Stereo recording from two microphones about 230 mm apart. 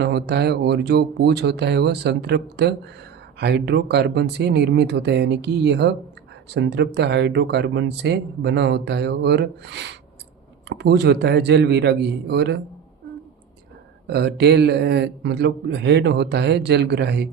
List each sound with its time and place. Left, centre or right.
0.0 s speech: right
14.1 s speech: right